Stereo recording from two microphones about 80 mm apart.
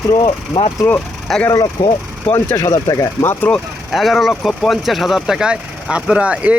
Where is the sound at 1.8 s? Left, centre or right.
Left.